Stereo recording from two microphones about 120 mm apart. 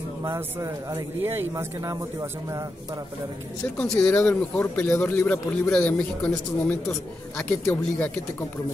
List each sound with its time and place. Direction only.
0.2 s speech: 30° right (ahead or behind)
3.6 s speech: 10° left (ahead or behind)